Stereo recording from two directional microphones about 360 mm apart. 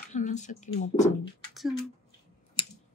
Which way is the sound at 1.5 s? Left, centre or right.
Centre.